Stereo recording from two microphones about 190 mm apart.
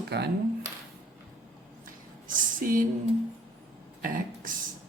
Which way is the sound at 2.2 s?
45° right (ahead or behind).